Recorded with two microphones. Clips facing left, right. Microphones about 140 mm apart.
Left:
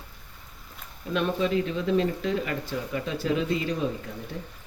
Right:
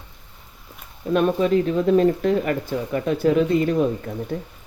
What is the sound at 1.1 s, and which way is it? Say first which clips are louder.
Speech: right 7 dB; 45° right (ahead or behind).